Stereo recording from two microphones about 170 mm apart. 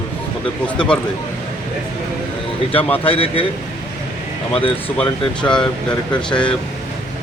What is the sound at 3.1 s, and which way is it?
Speech, 35° left (ahead or behind).